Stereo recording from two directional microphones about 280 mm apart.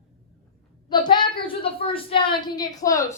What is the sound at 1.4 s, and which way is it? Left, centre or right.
A woman's voice, centre.